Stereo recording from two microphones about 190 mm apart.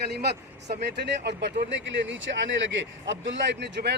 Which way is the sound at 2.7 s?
70° right (ahead or behind).